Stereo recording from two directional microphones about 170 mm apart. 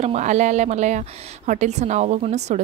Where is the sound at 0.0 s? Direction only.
40° right (ahead or behind).